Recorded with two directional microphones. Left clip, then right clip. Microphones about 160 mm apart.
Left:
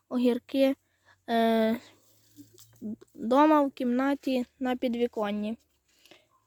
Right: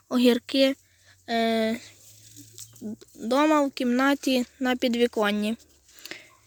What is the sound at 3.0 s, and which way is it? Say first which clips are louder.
Speech: left 1 dB; 25° left (ahead or behind).